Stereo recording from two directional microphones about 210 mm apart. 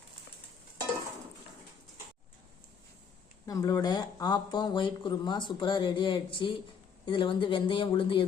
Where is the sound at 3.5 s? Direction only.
15° left (ahead or behind).